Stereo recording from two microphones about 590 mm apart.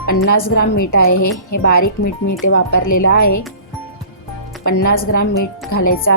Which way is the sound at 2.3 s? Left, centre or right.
Centre.